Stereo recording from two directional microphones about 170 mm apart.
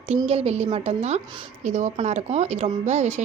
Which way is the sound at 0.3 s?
40° right (ahead or behind).